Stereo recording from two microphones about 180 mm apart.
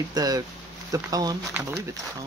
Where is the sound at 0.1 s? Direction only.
20° right (ahead or behind).